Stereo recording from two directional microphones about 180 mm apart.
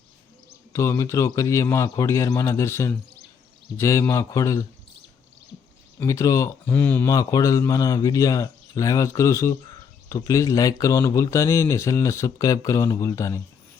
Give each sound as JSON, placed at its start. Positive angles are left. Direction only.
{"t": 0.7, "sound": "speech", "side_deg": 15}
{"t": 6.0, "sound": "speech", "side_deg": 15}